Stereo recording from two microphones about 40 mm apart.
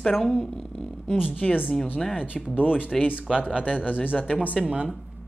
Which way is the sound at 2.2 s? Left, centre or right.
Right.